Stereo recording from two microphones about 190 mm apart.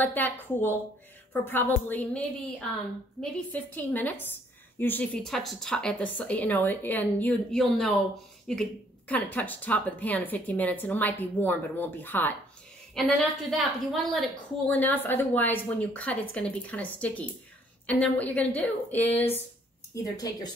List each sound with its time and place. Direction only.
0.0 s a woman's voice: 10° left (ahead or behind)